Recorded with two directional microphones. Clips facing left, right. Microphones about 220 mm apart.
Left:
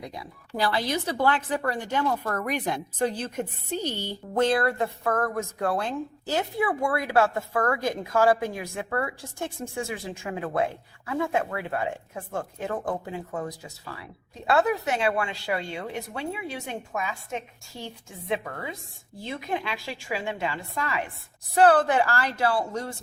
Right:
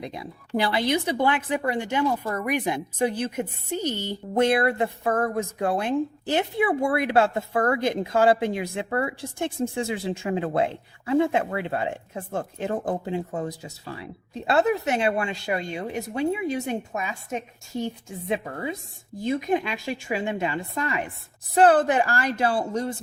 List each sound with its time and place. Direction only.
0.0 s a woman's voice: 20° right (ahead or behind)
3.8 s speech: 15° left (ahead or behind)
4.1 s speech: 15° right (ahead or behind)